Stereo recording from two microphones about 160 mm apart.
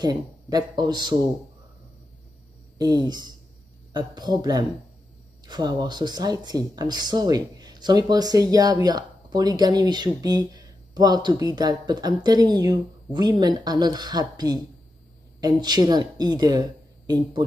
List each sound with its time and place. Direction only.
0.0 s speech: 25° right (ahead or behind)
2.8 s speech: 25° right (ahead or behind)